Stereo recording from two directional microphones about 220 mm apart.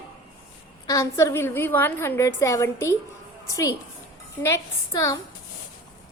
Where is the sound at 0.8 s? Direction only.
15° left (ahead or behind).